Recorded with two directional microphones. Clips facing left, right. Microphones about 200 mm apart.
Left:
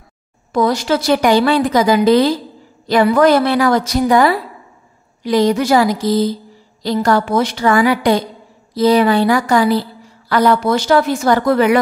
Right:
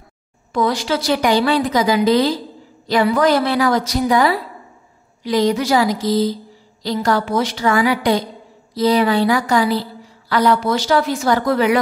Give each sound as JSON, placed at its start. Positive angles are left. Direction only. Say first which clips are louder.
{"t": 0.5, "sound": "a woman's voice", "louder": "left 3 dB", "side_deg": 40}